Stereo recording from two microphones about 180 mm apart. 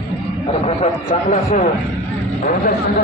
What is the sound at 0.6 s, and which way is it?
Speech, 40° left (ahead or behind).